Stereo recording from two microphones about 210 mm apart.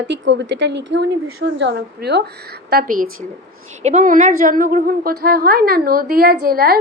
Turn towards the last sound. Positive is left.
turn(degrees=-45)  # may be behind; listen again after turning